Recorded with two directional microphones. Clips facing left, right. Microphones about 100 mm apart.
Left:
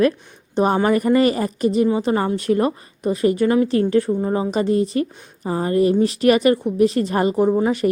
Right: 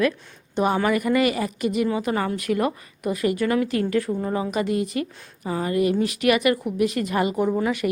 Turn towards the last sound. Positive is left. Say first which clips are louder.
# left 5 dB
turn(degrees=30)  # may be behind; listen again after turning